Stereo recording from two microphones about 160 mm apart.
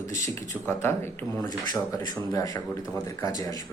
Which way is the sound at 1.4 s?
25° left (ahead or behind).